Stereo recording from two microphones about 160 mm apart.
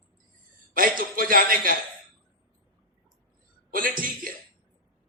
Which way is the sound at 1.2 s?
60° right (ahead or behind).